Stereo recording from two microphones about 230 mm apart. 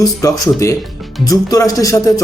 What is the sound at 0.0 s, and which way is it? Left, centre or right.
Speech, centre.